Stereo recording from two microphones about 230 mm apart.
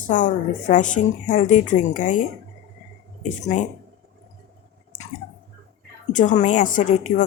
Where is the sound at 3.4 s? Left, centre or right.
Left.